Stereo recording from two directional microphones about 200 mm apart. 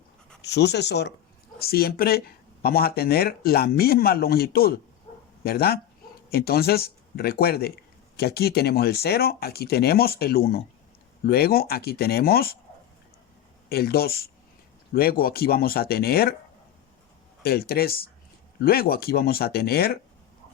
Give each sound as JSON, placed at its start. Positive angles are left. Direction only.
{"t": 0.4, "sound": "speech", "side_deg": 55}
{"t": 13.7, "sound": "speech", "side_deg": 50}
{"t": 17.4, "sound": "speech", "side_deg": 50}